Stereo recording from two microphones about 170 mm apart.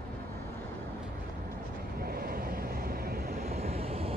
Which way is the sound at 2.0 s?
65° right (ahead or behind).